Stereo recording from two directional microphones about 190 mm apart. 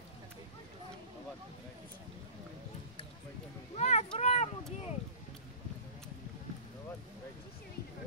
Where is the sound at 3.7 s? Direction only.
35° left (ahead or behind).